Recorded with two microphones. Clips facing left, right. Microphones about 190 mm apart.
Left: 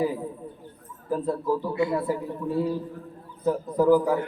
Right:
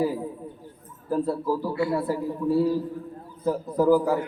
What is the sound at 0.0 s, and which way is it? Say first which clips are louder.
A man's voice: right 1 dB; 5° right (ahead or behind).